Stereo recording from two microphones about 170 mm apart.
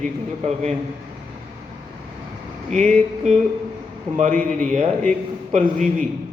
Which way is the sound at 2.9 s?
45° right (ahead or behind).